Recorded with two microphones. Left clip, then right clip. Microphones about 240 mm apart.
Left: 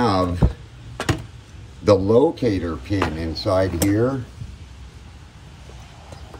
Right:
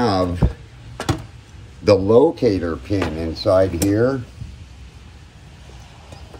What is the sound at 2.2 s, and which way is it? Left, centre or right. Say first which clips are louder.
Speech: right 3 dB; centre.